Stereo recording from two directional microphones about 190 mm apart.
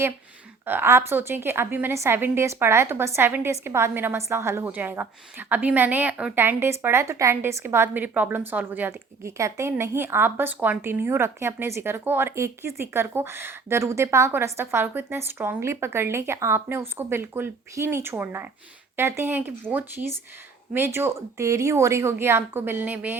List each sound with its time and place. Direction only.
0.6 s a woman's voice: 10° right (ahead or behind)